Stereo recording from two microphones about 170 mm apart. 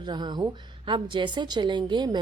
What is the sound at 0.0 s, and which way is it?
A woman's voice, 25° right (ahead or behind).